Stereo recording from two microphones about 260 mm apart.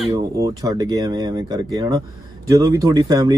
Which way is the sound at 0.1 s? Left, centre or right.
Centre.